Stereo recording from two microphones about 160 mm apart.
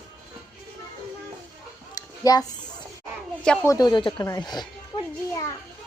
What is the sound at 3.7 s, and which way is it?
A child's voice, 25° left (ahead or behind).